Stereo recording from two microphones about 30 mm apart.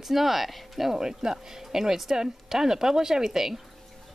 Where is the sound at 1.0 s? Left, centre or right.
Centre.